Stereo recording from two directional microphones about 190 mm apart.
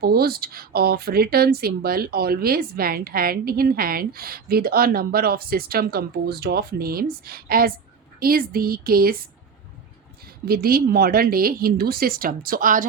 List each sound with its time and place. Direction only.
0.0 s speech: 55° right (ahead or behind)
10.4 s speech: 55° right (ahead or behind)